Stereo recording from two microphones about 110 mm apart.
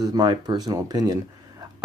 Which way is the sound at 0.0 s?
40° right (ahead or behind).